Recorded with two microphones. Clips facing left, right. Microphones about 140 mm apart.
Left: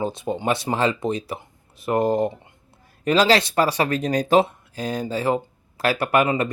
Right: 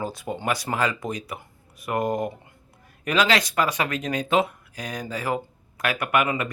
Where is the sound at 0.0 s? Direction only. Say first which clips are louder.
Left 4 dB; 25° left (ahead or behind).